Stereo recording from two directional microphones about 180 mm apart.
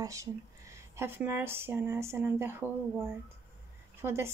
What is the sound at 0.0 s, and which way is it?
Speech, 20° right (ahead or behind).